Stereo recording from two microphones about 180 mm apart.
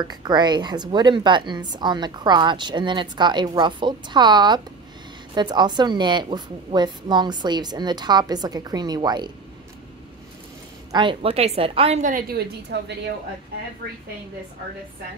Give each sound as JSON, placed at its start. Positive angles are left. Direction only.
{"t": 0.0, "sound": "a woman's voice", "side_deg": -25}
{"t": 10.9, "sound": "a woman's voice", "side_deg": -25}